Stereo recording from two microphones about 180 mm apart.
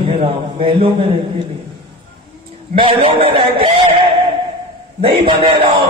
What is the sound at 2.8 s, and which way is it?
A man's voice, 30° right (ahead or behind).